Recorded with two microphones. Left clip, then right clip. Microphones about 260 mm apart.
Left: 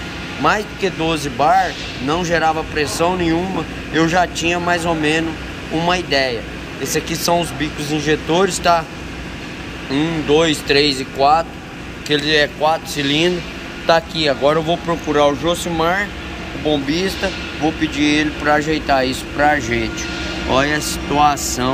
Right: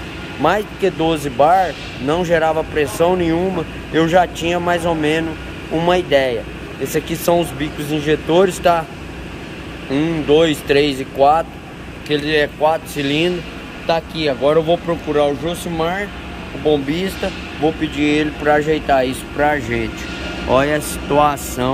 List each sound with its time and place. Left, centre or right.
0.4 s speech: centre
9.8 s speech: centre